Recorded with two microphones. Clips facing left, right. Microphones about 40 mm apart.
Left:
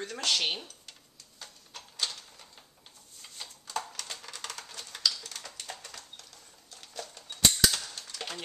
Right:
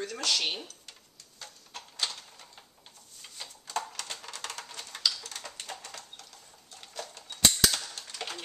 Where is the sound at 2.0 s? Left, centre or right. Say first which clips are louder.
Right 1 dB; centre.